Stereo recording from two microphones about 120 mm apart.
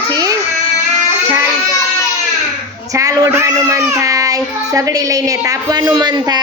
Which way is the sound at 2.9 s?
30° right (ahead or behind).